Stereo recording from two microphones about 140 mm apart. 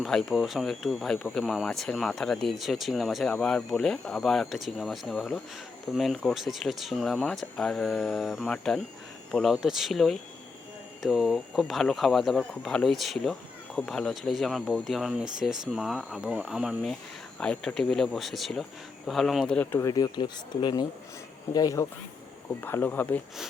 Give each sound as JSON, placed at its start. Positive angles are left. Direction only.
{"t": 0.0, "sound": "speech", "side_deg": 0}
{"t": 19.8, "sound": "speech", "side_deg": 30}
{"t": 22.6, "sound": "speech", "side_deg": 15}